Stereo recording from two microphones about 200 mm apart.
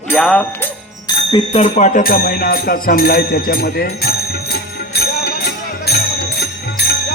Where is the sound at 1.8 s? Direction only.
40° left (ahead or behind).